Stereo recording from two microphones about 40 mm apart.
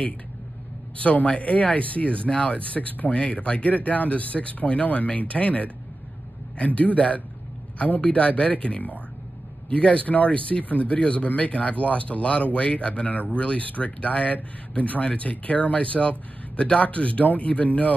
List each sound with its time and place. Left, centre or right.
0.9 s speech: left